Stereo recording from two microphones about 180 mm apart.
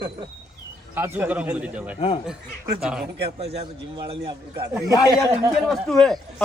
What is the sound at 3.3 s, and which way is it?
A man's voice, 35° right (ahead or behind).